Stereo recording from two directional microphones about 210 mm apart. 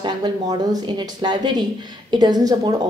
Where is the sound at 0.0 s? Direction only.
20° right (ahead or behind).